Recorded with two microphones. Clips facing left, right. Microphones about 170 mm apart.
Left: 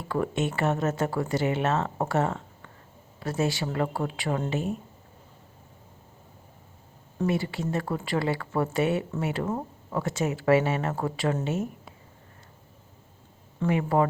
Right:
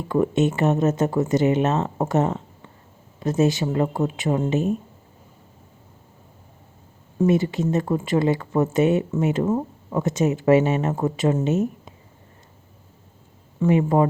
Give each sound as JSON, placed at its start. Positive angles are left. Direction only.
{"t": 0.1, "sound": "speech", "side_deg": -20}
{"t": 7.3, "sound": "speech", "side_deg": -20}
{"t": 13.7, "sound": "speech", "side_deg": -20}